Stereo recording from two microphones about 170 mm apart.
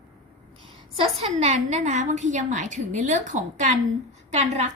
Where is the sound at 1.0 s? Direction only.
40° right (ahead or behind).